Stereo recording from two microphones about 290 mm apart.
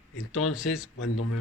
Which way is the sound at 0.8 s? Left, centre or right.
Left.